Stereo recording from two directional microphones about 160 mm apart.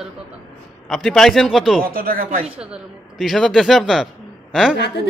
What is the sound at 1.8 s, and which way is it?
Speech, 65° right (ahead or behind).